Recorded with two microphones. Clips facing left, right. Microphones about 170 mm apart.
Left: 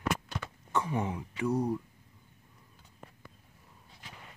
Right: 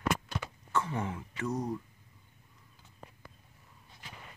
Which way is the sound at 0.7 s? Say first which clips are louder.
Left 2 dB; 15° left (ahead or behind).